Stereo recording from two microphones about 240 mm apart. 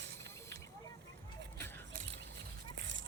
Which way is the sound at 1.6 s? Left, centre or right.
Centre.